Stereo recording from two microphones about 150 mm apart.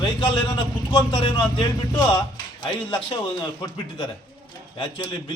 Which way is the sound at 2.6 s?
35° left (ahead or behind).